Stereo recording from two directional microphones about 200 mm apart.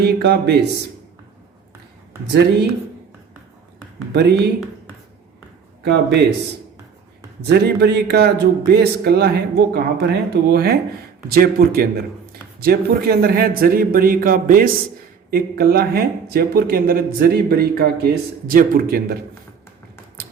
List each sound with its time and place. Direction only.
0.0 s a man's voice: 55° right (ahead or behind)
2.3 s a man's voice: 55° right (ahead or behind)
4.1 s a man's voice: 55° right (ahead or behind)
5.8 s a man's voice: 55° right (ahead or behind)
7.4 s speech: 55° right (ahead or behind)